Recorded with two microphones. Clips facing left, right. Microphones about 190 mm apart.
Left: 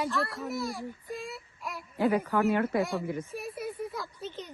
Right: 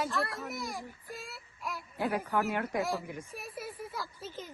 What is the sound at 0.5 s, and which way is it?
Speech, 15° right (ahead or behind).